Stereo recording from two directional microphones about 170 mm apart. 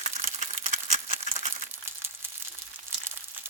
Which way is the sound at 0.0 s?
45° right (ahead or behind).